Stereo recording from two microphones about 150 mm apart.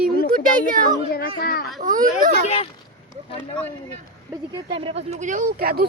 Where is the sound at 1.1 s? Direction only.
90° left.